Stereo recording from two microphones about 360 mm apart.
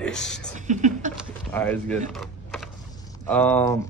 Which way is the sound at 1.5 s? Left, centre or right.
Centre.